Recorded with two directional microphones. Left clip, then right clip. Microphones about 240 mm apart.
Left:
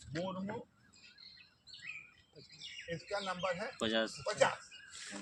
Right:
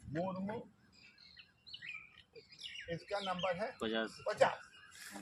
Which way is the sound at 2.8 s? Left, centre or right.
Centre.